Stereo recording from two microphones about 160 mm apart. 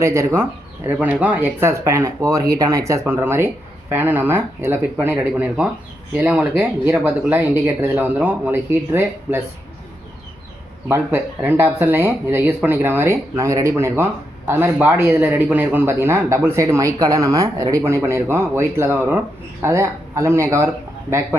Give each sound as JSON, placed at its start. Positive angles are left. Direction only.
{"t": 0.0, "sound": "speech", "side_deg": -20}
{"t": 10.8, "sound": "speech", "side_deg": -15}